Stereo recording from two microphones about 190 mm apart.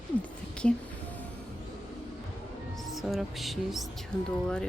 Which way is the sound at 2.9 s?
Centre (ahead or behind).